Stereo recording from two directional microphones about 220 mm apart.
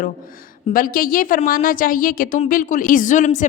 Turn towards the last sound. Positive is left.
turn(degrees=35)  # may be behind; listen again after turning